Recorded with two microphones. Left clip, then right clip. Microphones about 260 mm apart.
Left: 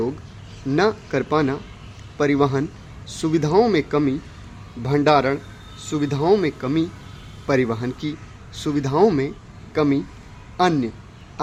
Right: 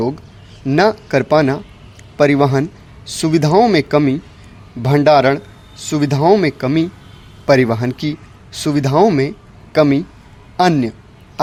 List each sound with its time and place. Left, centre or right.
0.7 s speech: right